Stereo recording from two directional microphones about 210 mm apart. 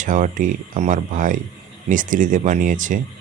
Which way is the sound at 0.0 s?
40° right (ahead or behind).